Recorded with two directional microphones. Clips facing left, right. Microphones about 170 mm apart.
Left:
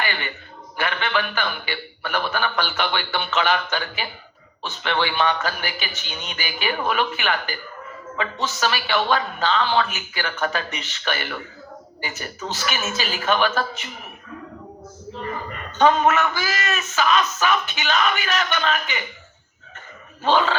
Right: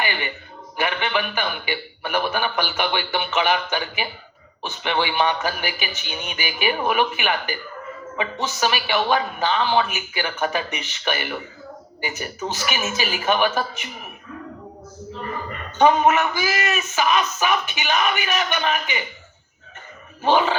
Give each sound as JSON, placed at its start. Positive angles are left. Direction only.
{"t": 0.8, "sound": "speech", "side_deg": -15}
{"t": 15.8, "sound": "speech", "side_deg": -15}
{"t": 20.2, "sound": "speech", "side_deg": -15}